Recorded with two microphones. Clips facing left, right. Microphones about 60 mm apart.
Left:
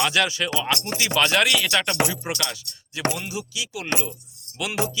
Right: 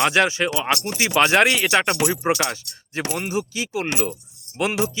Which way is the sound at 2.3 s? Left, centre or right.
Right.